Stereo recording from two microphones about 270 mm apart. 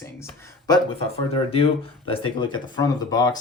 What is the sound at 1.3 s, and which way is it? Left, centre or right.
Speech, left.